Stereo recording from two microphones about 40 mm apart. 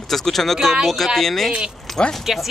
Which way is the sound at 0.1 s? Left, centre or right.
Centre.